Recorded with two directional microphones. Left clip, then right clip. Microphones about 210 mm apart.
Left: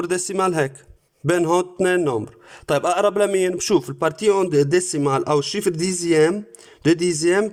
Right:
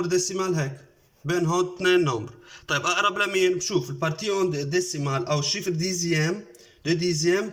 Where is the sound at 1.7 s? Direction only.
35° left (ahead or behind).